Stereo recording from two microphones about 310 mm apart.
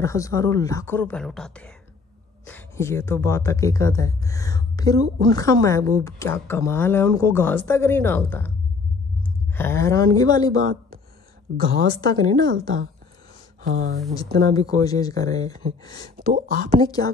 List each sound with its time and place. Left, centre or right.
0.0 s speech: centre
9.5 s speech: centre
11.9 s speech: centre
13.7 s speech: right
14.1 s speech: centre
15.9 s speech: right
16.8 s speech: centre